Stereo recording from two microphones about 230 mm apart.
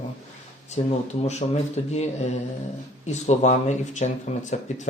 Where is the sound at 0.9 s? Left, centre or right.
Left.